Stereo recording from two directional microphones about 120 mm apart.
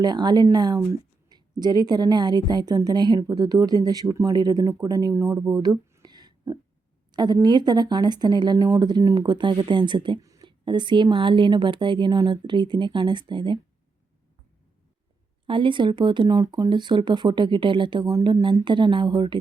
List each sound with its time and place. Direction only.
0.0 s a woman's voice: 35° right (ahead or behind)
6.0 s a sound: 35° right (ahead or behind)
7.4 s a woman's voice: 35° right (ahead or behind)
15.4 s a woman's voice: 45° right (ahead or behind)